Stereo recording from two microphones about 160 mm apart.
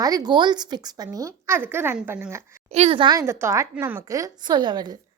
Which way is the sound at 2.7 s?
35° right (ahead or behind).